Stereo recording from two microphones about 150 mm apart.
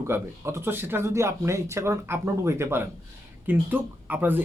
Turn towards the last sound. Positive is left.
turn(degrees=-10)  # may be behind; listen again after turning